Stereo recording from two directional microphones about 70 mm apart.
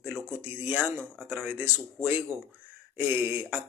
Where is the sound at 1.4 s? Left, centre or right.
Right.